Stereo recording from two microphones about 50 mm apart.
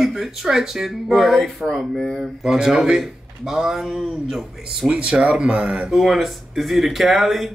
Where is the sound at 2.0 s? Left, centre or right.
Centre.